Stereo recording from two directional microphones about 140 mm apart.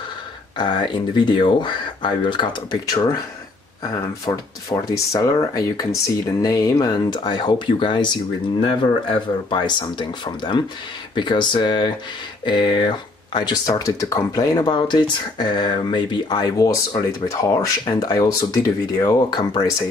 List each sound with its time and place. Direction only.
0.6 s speech: 35° left (ahead or behind)
4.3 s speech: 25° left (ahead or behind)